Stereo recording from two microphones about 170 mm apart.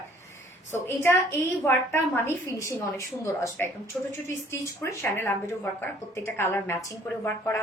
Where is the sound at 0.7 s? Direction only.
15° left (ahead or behind).